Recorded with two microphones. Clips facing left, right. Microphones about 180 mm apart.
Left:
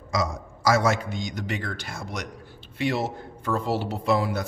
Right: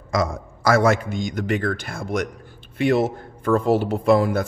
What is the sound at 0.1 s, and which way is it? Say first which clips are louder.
A man's voice: right 4 dB; 55° right (ahead or behind).